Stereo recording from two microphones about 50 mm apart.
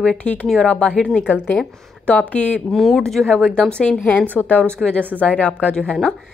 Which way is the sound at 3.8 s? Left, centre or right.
Left.